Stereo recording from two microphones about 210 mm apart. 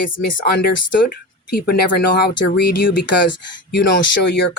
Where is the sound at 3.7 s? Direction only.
50° left (ahead or behind).